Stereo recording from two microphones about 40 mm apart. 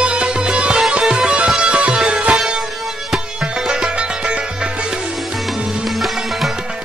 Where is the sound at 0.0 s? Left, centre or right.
Right.